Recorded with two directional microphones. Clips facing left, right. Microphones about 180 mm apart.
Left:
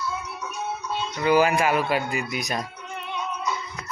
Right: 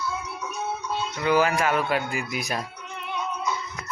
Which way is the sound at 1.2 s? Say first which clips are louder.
Left 2 dB; 10° left (ahead or behind).